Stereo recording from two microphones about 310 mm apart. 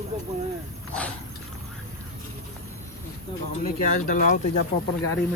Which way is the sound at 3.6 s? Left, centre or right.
Left.